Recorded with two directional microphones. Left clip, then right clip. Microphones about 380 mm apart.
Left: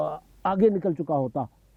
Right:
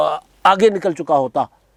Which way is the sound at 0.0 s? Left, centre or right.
Centre.